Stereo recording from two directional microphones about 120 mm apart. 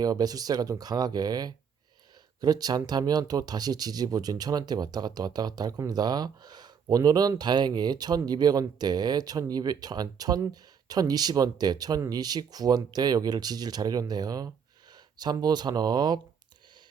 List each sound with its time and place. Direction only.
0.0 s speech: 30° right (ahead or behind)